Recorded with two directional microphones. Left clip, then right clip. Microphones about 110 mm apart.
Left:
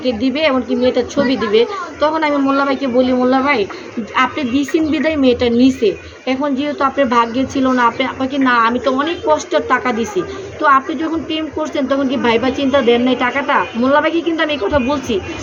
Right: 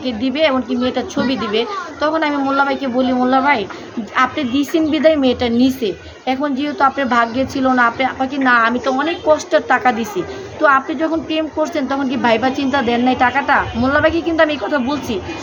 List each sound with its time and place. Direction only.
0.0 s a woman's voice: 45° right (ahead or behind)